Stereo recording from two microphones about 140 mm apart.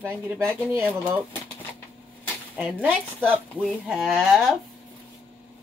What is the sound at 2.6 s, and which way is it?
Speech, 10° right (ahead or behind).